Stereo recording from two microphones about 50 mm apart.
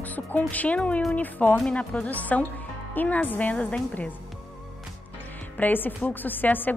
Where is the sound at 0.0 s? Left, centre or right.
Left.